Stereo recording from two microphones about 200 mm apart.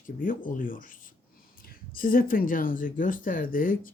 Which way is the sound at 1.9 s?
45° left (ahead or behind).